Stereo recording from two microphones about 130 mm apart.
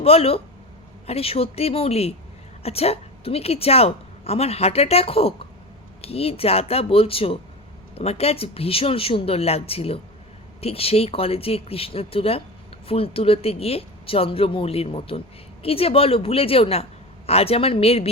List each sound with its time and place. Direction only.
0.0 s a woman's voice: 50° left (ahead or behind)